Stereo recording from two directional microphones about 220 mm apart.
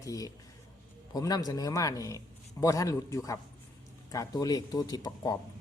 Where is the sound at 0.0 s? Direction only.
15° left (ahead or behind).